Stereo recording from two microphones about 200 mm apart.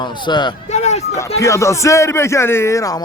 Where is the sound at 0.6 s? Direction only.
35° left (ahead or behind).